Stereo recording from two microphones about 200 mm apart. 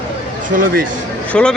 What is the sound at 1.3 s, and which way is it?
Speech, 5° left (ahead or behind).